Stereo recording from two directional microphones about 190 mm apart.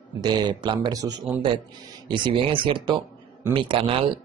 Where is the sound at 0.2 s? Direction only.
20° right (ahead or behind).